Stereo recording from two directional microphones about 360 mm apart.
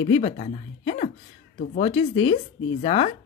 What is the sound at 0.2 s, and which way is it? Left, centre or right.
Speech, centre.